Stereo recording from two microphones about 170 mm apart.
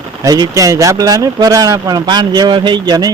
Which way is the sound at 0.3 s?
20° right (ahead or behind).